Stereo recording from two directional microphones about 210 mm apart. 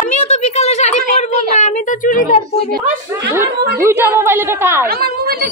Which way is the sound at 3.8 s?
10° right (ahead or behind).